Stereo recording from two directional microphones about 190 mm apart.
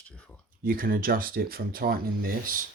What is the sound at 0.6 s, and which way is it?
Speech, 50° right (ahead or behind).